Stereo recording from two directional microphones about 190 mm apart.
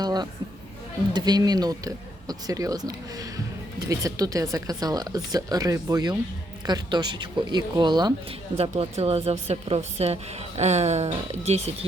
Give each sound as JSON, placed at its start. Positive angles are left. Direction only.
{"t": 0.0, "sound": "a woman's voice", "side_deg": -20}
{"t": 8.5, "sound": "a woman's voice", "side_deg": -30}